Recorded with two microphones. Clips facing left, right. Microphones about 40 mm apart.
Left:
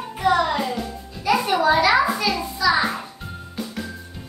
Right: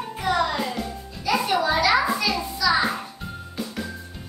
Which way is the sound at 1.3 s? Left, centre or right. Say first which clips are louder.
Left 4 dB; centre.